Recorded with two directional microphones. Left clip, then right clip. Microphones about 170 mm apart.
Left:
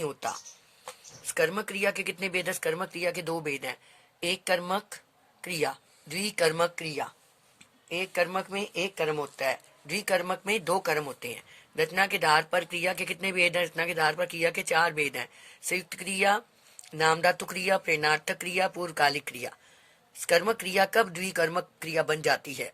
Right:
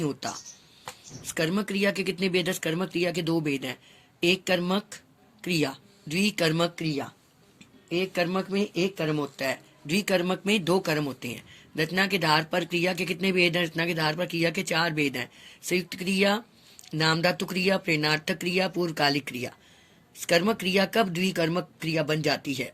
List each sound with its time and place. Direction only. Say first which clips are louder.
0.0 s speech: right 1 dB; 35° left (ahead or behind)